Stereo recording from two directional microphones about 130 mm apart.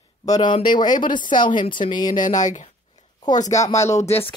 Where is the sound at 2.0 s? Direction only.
75° left (ahead or behind).